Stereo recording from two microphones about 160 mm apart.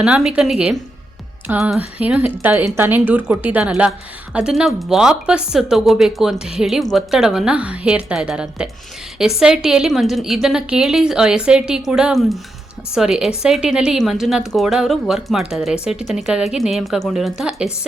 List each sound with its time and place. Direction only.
0.0 s a woman's voice: 5° right (ahead or behind)